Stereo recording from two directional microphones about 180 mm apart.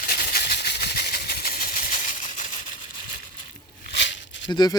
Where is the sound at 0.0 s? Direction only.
55° left (ahead or behind).